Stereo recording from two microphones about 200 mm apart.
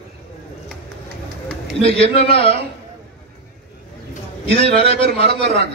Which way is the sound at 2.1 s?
30° left (ahead or behind).